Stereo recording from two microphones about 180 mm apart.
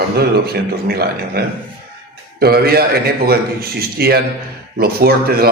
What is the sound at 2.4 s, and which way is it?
A man's voice, 60° right (ahead or behind).